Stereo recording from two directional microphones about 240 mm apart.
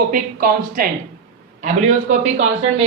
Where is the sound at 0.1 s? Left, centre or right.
Right.